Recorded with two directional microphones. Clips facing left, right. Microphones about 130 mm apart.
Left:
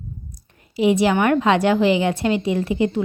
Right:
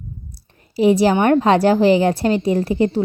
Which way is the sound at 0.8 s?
35° right (ahead or behind).